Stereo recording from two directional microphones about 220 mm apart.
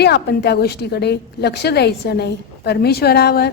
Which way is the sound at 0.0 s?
50° left (ahead or behind).